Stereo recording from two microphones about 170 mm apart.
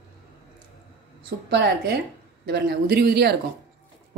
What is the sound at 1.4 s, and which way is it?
Speech, 80° right.